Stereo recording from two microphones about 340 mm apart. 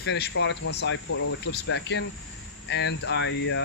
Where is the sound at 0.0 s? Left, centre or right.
Left.